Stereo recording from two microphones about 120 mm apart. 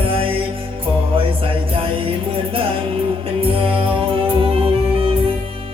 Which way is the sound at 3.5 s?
50° right (ahead or behind).